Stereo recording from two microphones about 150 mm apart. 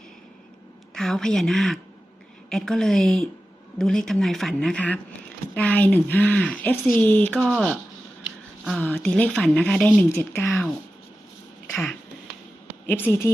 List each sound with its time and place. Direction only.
0.9 s a woman's voice: 5° left (ahead or behind)
7.3 s a woman's voice: centre (ahead or behind)
8.8 s speech: 10° left (ahead or behind)
11.7 s a sound: centre (ahead or behind)
12.9 s speech: 15° left (ahead or behind)